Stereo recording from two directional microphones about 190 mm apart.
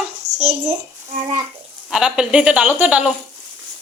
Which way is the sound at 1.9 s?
5° right (ahead or behind).